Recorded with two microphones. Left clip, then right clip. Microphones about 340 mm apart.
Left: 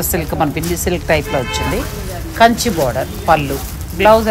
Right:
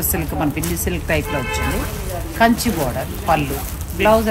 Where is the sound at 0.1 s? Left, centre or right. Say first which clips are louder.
Left 5 dB; left.